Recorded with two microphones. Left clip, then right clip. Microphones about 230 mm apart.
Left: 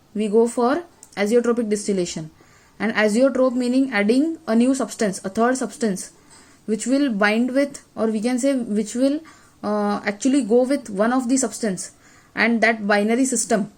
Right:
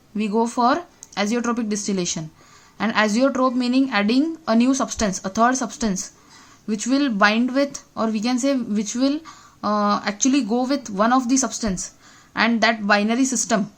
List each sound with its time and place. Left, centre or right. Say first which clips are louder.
0.2 s speech: left 2 dB; right